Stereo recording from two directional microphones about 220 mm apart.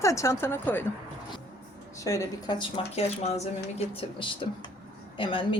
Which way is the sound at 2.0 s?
15° left (ahead or behind).